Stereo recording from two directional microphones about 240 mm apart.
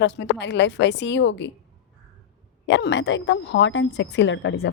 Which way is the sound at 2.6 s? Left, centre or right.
Left.